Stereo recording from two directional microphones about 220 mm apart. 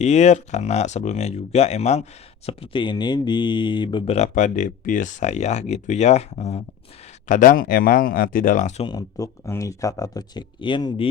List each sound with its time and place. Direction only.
0.0 s speech: 30° left (ahead or behind)
8.9 s speech: 15° left (ahead or behind)